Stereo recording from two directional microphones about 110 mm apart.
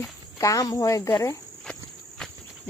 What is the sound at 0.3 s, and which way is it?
Speech, 30° left (ahead or behind).